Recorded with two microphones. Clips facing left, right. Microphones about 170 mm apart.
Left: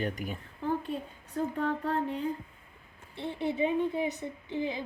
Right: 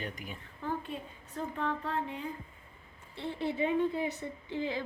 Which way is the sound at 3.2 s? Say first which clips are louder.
Left 2 dB; 20° left (ahead or behind).